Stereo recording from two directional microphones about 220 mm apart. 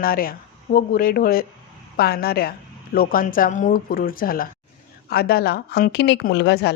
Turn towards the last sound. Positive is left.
turn(degrees=50)  # may be behind; listen again after turning